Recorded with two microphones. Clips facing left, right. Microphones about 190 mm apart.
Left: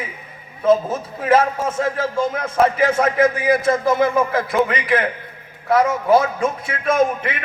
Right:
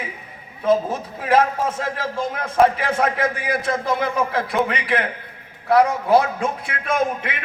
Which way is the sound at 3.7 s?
45° left (ahead or behind).